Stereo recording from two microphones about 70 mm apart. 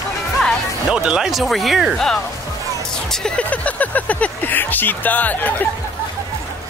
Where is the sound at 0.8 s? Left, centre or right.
Centre.